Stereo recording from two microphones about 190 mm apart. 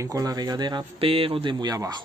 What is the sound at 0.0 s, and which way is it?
Speech, 20° right (ahead or behind).